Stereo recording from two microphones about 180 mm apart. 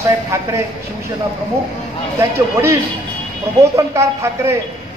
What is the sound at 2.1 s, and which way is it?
Speech, 15° right (ahead or behind).